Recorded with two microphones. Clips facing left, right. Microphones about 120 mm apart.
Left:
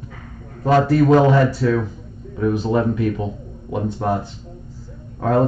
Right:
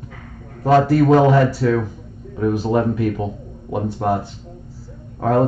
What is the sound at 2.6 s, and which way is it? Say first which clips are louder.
Speech: right 1 dB; 50° right (ahead or behind).